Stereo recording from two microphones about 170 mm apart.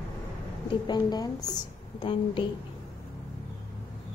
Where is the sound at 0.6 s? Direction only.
25° left (ahead or behind).